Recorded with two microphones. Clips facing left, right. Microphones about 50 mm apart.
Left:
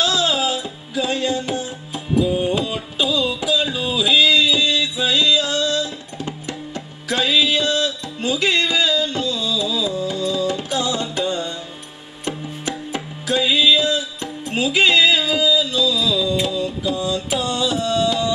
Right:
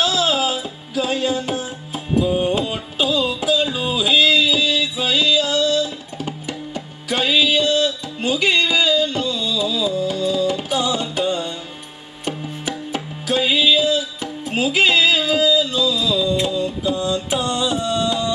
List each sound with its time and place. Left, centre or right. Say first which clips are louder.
0.0 s music: right 1 dB; centre
3.7 s music: even; centre
13.3 s music: even; centre
17.0 s mantra: right 1 dB; centre
17.5 s music: left 1 dB; centre